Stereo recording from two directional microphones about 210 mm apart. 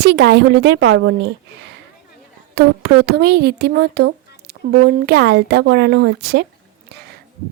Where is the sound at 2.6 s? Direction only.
50° right (ahead or behind).